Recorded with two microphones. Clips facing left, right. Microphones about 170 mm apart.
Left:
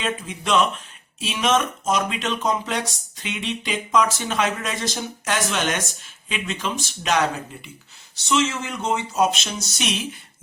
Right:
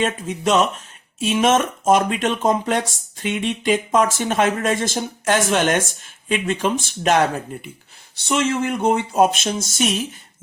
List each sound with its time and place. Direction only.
0.0 s speech: 45° right (ahead or behind)